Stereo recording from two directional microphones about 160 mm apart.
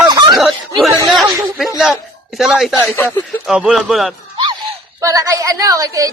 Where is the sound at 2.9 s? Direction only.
15° left (ahead or behind).